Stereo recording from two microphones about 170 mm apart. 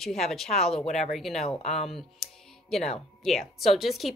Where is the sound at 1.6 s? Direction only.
40° left (ahead or behind).